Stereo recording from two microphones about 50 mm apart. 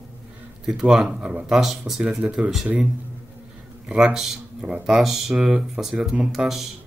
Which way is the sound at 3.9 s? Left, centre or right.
Centre.